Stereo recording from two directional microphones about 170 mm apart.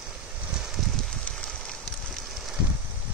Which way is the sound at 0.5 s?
Centre (ahead or behind).